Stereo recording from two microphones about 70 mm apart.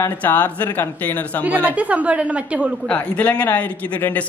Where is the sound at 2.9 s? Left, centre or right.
Left.